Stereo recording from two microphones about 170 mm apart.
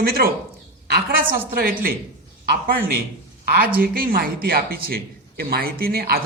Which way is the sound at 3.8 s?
60° right (ahead or behind).